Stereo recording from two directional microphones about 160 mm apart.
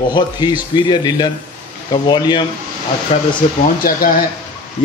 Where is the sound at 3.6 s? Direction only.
65° left (ahead or behind).